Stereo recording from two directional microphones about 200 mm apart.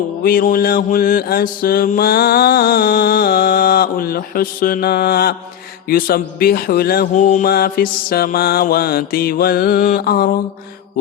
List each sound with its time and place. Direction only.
0.2 s mantra: 45° left (ahead or behind)